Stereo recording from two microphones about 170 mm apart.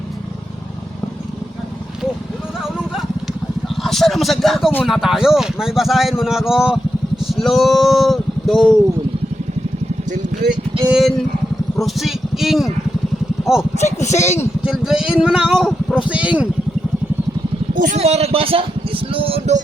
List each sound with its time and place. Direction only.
3.8 s speech: centre (ahead or behind)
10.8 s a man's voice: 5° right (ahead or behind)
13.7 s speech: 40° left (ahead or behind)
14.6 s speech: 5° right (ahead or behind)
17.7 s a man's voice: 50° right (ahead or behind)
18.0 s a sound: 35° right (ahead or behind)